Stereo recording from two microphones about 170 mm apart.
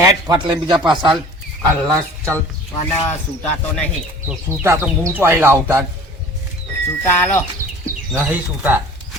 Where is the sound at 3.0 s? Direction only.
10° left (ahead or behind).